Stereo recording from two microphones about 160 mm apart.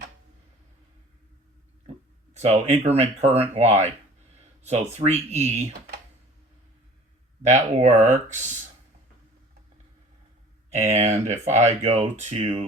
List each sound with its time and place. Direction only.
2.3 s speech: 45° right (ahead or behind)
7.4 s speech: 45° right (ahead or behind)
10.7 s speech: 45° right (ahead or behind)